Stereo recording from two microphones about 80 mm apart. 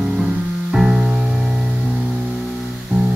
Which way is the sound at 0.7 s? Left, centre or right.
Centre.